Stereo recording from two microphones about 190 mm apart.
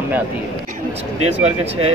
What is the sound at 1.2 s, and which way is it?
Speech, 35° right (ahead or behind).